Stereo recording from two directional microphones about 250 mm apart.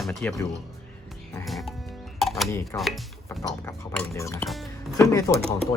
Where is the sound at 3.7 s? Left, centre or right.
Centre.